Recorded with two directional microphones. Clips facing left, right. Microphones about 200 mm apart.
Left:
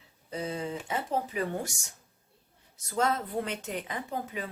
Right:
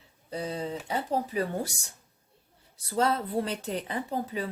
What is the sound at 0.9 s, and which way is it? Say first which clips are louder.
Speech: right 3 dB; 35° right (ahead or behind).